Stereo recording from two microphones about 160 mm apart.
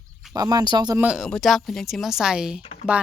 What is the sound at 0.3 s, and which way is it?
Speech, 25° right (ahead or behind).